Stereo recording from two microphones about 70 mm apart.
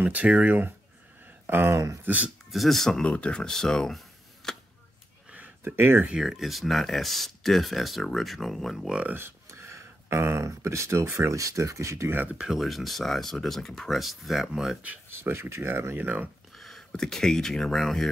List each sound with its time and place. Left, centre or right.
0.0 s speech: right
2.0 s speech: right
2.5 s speech: centre
3.0 s speech: centre
4.4 s a sound: centre
5.8 s speech: right
6.0 s speech: centre
8.8 s speech: centre
9.1 s speech: right
12.1 s speech: right
12.4 s speech: centre
15.0 s speech: right
16.5 s speech: centre